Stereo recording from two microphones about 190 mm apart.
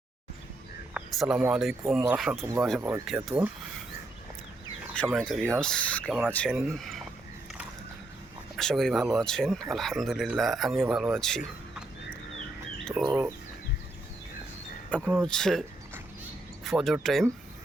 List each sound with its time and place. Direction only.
0.9 s speech: 5° right (ahead or behind)
2.4 s speech: 15° right (ahead or behind)
2.6 s speech: centre (ahead or behind)
2.9 s speech: 10° right (ahead or behind)
4.9 s speech: 5° left (ahead or behind)
8.5 s speech: centre (ahead or behind)
13.0 s speech: centre (ahead or behind)
14.8 s speech: 5° left (ahead or behind)
16.6 s speech: centre (ahead or behind)